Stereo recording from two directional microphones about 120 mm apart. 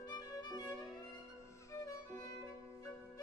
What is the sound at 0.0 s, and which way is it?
Violin, 35° left (ahead or behind).